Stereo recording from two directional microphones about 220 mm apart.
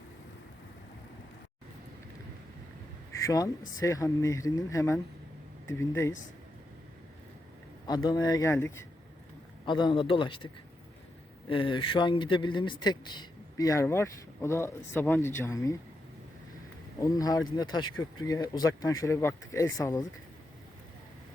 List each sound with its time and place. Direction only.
3.1 s a sound: 15° left (ahead or behind)
3.8 s speech: 15° left (ahead or behind)
7.9 s speech: 15° left (ahead or behind)
17.0 s speech: 15° left (ahead or behind)